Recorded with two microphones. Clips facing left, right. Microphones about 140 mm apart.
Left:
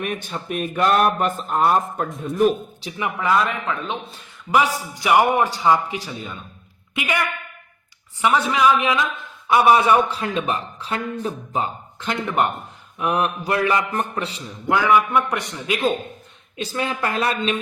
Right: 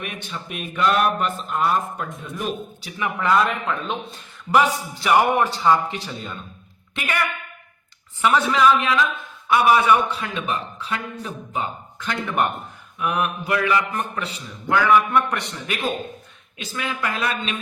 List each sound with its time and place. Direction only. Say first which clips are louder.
0.0 s speech: left 5 dB; 45° left (ahead or behind)
3.0 s a man's voice: even; 10° left (ahead or behind)
3.3 s a man's voice: right 1 dB; centre (ahead or behind)
8.2 s a man's voice: even; 15° left (ahead or behind)
9.5 s a man's voice: left 2 dB; 25° left (ahead or behind)
13.0 s a man's voice: left 2 dB; 30° left (ahead or behind)
14.7 s a man's voice: even; 15° left (ahead or behind)
16.6 s a man's voice: left 4 dB; 30° left (ahead or behind)